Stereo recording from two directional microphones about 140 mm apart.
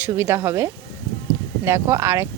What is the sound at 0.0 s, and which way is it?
Speech, 15° right (ahead or behind).